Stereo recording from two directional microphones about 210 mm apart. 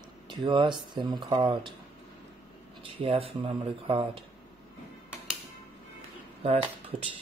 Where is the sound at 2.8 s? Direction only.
25° right (ahead or behind).